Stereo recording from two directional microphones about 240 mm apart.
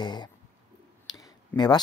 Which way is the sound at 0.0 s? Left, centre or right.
Centre.